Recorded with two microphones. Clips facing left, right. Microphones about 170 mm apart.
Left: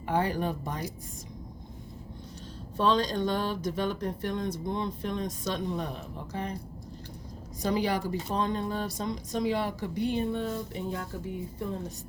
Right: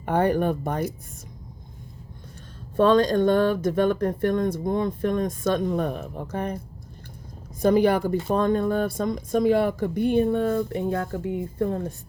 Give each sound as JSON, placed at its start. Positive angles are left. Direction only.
{"t": 0.0, "sound": "speech", "side_deg": -55}
{"t": 2.7, "sound": "speech", "side_deg": -55}
{"t": 7.6, "sound": "speech", "side_deg": -55}